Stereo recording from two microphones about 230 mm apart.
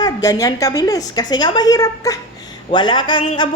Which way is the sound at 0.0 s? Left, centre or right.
Centre.